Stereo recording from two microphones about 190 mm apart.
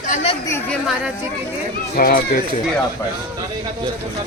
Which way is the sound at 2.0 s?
50° left (ahead or behind).